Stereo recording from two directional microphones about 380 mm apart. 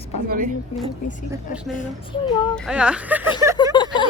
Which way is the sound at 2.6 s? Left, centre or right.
Centre.